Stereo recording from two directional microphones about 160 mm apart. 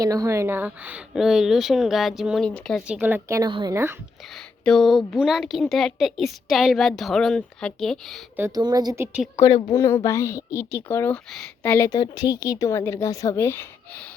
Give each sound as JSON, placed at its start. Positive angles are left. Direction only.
{"t": 0.0, "sound": "a woman's voice", "side_deg": -20}
{"t": 2.8, "sound": "speech", "side_deg": -10}
{"t": 4.4, "sound": "a woman's voice", "side_deg": 5}
{"t": 8.4, "sound": "speech", "side_deg": -20}
{"t": 9.4, "sound": "speech", "side_deg": 30}
{"t": 9.7, "sound": "speech", "side_deg": 20}
{"t": 11.9, "sound": "speech", "side_deg": 25}